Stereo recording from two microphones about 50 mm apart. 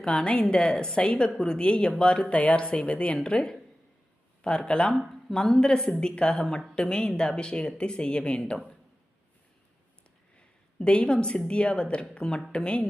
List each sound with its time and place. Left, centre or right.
0.0 s a woman's voice: centre
2.2 s a woman's voice: left
10.8 s a woman's voice: left